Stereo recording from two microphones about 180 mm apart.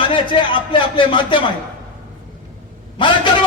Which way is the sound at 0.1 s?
30° left (ahead or behind).